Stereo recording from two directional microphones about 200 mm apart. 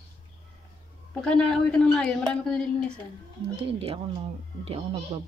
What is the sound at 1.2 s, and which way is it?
A woman's voice, 5° left (ahead or behind).